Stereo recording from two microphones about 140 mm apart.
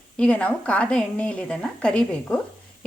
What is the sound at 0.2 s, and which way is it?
A woman's voice, 10° left (ahead or behind).